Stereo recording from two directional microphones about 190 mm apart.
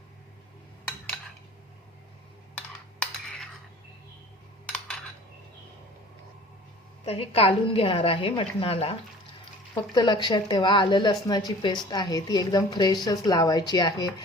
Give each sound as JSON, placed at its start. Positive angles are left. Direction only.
{"t": 7.0, "sound": "a woman's voice", "side_deg": 30}